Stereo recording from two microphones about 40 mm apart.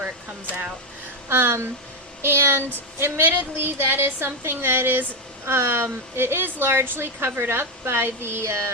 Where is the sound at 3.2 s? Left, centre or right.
Right.